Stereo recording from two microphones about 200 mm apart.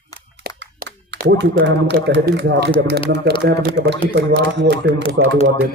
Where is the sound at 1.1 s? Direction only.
55° right (ahead or behind).